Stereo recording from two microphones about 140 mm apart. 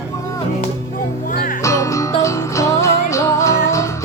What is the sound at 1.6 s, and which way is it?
Music, 20° left (ahead or behind).